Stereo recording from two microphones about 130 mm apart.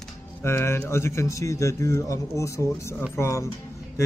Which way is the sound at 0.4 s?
20° left (ahead or behind).